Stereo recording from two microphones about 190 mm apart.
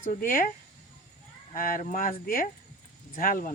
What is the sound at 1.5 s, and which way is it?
Speech, 45° left (ahead or behind).